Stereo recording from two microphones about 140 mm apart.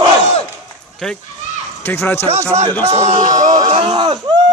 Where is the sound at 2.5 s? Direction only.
45° right (ahead or behind).